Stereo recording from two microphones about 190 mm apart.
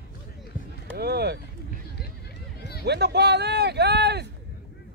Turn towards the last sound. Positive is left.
turn(degrees=-60)  # may be behind; listen again after turning